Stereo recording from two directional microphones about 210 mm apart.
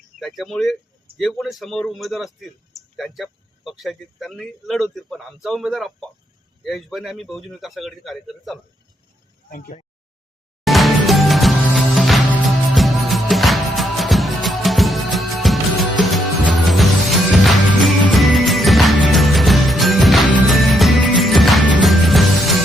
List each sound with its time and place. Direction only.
0.2 s a man's voice: centre (ahead or behind)
9.5 s speech: 40° left (ahead or behind)
10.6 s music: centre (ahead or behind)